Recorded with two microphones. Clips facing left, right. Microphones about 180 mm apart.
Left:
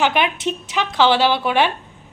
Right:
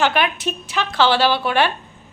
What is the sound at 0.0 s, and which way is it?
A woman's voice, 20° left (ahead or behind).